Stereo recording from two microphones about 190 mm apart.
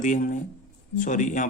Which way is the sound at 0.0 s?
45° left (ahead or behind).